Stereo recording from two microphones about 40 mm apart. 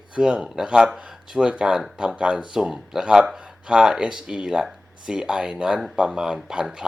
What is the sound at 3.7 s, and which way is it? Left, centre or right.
Speech, centre.